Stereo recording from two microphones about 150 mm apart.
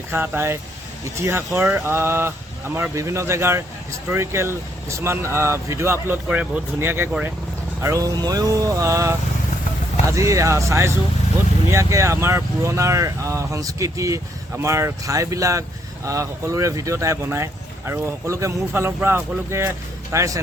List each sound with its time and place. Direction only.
0.1 s speech: 15° right (ahead or behind)